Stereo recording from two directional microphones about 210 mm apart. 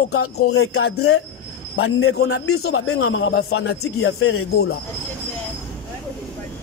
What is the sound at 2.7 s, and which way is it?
Speech, 80° left.